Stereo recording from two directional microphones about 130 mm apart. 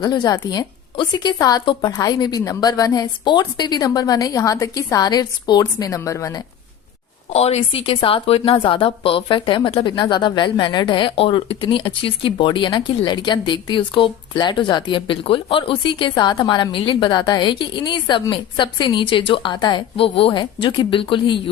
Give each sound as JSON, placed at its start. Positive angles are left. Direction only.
{"t": 0.0, "sound": "a woman's voice", "side_deg": 30}
{"t": 7.3, "sound": "a woman's voice", "side_deg": 50}